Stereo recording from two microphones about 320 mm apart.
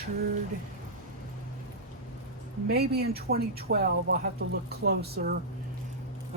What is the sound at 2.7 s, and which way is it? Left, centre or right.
Speech, right.